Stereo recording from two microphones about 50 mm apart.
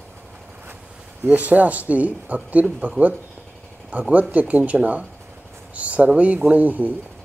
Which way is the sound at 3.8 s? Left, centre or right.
Right.